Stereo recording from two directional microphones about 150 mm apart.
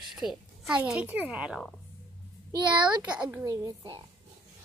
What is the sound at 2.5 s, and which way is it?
A child's voice, 30° right (ahead or behind).